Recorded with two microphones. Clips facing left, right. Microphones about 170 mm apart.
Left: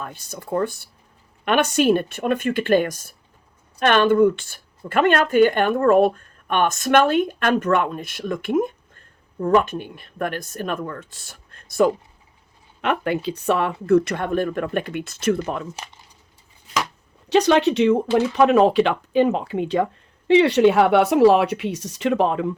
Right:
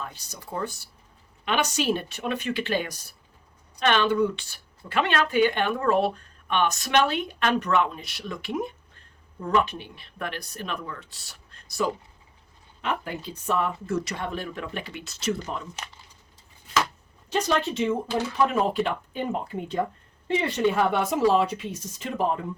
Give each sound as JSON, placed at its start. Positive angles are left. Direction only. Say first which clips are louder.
{"t": 0.0, "sound": "speech", "louder": "left 5 dB", "side_deg": 55}
{"t": 12.8, "sound": "speech", "louder": "left 8 dB", "side_deg": 70}
{"t": 17.2, "sound": "speech", "louder": "left 9 dB", "side_deg": 75}